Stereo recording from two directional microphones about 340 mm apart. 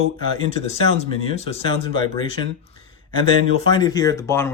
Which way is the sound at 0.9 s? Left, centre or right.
Centre.